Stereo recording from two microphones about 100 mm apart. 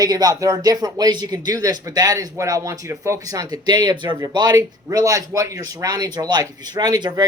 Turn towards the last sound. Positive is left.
turn(degrees=-40)  # may be behind; listen again after turning